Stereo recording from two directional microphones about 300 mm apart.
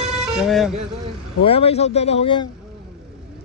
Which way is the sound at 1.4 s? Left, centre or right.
Centre.